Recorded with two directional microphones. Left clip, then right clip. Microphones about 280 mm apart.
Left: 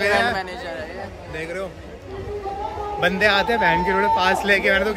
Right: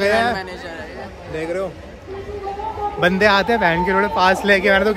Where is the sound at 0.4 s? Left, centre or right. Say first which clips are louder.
Left 1 dB; centre.